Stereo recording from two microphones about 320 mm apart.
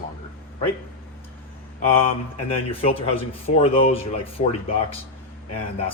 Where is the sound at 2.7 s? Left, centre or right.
Centre.